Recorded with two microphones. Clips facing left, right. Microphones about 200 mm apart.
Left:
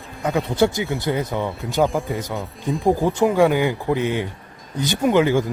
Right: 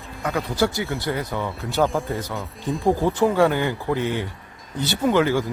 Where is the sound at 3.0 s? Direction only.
15° left (ahead or behind).